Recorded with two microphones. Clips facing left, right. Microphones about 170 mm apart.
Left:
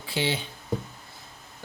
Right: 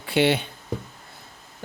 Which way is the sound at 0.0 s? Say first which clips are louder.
Right 8 dB; 65° right (ahead or behind).